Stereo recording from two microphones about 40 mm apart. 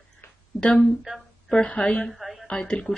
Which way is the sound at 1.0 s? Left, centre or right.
Centre.